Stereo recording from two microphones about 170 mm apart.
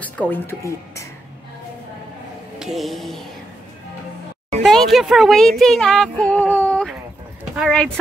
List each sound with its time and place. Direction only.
0.3 s speech: 15° left (ahead or behind)
2.6 s speech: centre (ahead or behind)
4.6 s speech: centre (ahead or behind)